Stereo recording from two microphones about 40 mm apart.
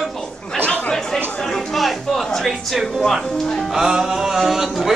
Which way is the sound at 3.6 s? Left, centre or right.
Centre.